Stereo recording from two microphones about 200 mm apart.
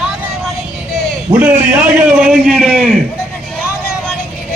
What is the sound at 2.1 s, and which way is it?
Speech, 5° right (ahead or behind).